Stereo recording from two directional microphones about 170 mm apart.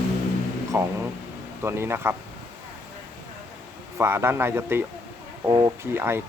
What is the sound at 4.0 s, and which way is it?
Speech, 15° right (ahead or behind).